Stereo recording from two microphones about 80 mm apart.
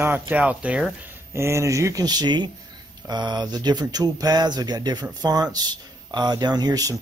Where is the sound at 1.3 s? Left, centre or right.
Right.